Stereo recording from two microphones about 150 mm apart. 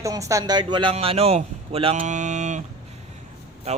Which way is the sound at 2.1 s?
55° right (ahead or behind).